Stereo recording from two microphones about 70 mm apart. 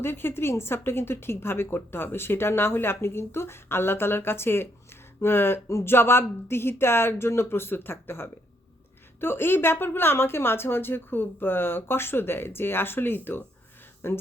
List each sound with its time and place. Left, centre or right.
0.0 s a woman's voice: left